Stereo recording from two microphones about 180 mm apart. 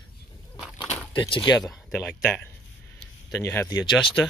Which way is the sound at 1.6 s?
Centre (ahead or behind).